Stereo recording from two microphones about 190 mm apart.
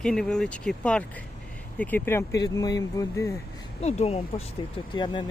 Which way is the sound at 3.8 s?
35° left (ahead or behind).